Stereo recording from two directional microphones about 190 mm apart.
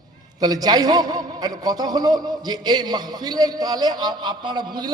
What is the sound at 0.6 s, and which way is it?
A man's voice, 20° right (ahead or behind).